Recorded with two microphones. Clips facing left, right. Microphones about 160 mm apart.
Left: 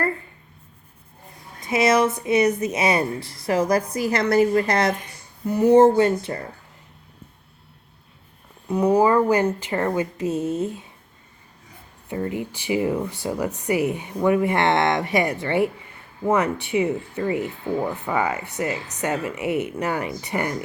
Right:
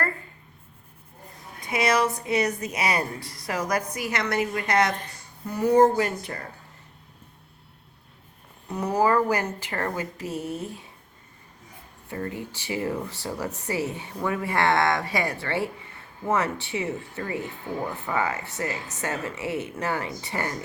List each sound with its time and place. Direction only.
1.6 s a woman's voice: 25° left (ahead or behind)
8.7 s a woman's voice: 15° left (ahead or behind)
12.0 s speech: 20° left (ahead or behind)